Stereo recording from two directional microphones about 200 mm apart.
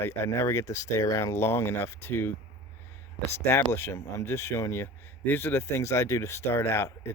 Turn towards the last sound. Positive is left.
turn(degrees=15)  # may be behind; listen again after turning